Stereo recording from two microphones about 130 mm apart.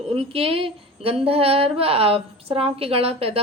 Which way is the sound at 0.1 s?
45° right (ahead or behind).